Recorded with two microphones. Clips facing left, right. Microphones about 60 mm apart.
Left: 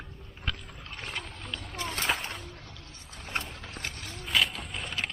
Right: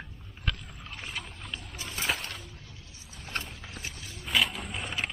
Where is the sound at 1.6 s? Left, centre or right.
Left.